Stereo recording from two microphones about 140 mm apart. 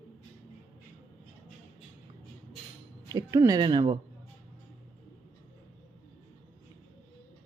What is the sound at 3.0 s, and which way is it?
Speech, 30° right (ahead or behind).